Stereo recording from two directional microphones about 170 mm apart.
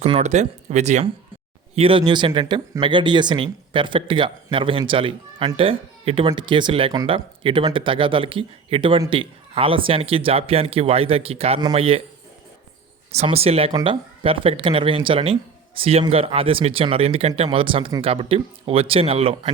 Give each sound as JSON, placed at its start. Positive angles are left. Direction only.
{"t": 0.0, "sound": "speech", "side_deg": -40}
{"t": 13.1, "sound": "speech", "side_deg": -35}